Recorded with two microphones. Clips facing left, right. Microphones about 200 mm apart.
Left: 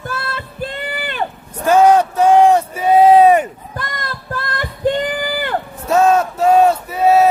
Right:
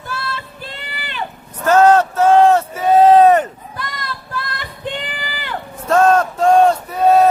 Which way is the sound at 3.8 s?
50° left (ahead or behind).